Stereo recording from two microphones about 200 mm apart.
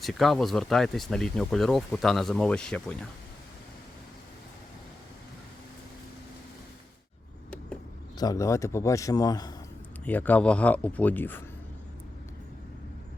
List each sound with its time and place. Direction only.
0.0 s speech: centre (ahead or behind)
8.2 s speech: 15° left (ahead or behind)
10.1 s speech: 10° left (ahead or behind)